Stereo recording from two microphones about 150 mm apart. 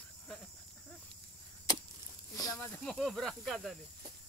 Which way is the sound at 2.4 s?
25° left (ahead or behind).